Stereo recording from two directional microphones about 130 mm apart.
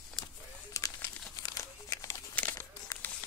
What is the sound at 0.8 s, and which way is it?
Crumpling, 25° left (ahead or behind).